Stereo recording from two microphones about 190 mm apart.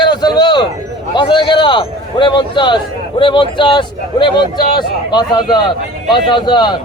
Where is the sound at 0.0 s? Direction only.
20° left (ahead or behind).